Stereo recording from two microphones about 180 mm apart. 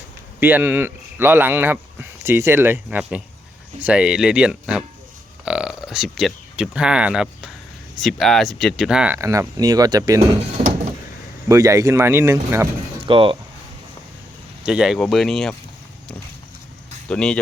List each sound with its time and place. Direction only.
0.3 s speech: 10° right (ahead or behind)
10.6 s door: 35° right (ahead or behind)
11.4 s speech: 20° right (ahead or behind)
13.1 s speech: 30° right (ahead or behind)
14.6 s speech: 5° right (ahead or behind)
17.1 s speech: 5° left (ahead or behind)